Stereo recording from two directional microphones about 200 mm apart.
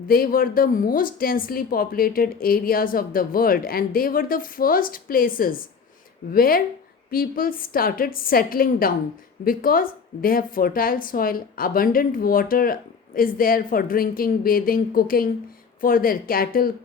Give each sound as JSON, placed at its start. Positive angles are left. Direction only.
{"t": 0.1, "sound": "a woman's voice", "side_deg": 45}